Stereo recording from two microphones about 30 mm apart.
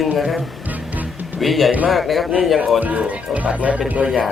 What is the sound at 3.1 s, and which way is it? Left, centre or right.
Speech, right.